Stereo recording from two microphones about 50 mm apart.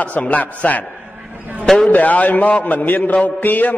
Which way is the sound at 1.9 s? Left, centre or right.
Left.